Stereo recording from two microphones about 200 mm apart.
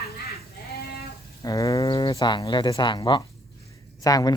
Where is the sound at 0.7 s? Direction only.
50° left (ahead or behind).